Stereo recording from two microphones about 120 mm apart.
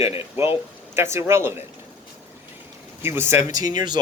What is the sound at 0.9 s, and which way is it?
Speech, 20° right (ahead or behind).